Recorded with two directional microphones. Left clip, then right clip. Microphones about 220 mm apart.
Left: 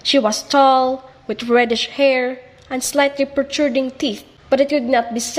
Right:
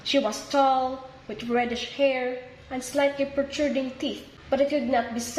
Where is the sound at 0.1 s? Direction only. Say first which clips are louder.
Left 9 dB; 40° left (ahead or behind).